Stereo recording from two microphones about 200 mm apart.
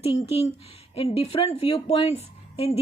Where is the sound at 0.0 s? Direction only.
30° left (ahead or behind).